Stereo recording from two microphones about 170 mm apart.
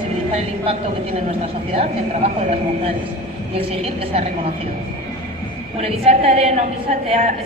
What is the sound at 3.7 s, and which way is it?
Speech, 35° right (ahead or behind).